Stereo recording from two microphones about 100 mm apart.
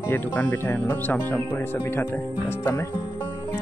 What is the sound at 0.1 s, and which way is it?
Speech, 20° left (ahead or behind).